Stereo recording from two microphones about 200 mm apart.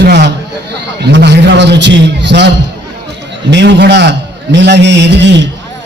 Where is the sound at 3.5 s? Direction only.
60° right (ahead or behind).